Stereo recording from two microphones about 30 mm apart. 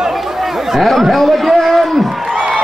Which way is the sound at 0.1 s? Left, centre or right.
Centre.